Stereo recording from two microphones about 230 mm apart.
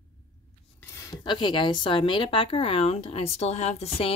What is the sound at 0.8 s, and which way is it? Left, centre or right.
Speech, centre.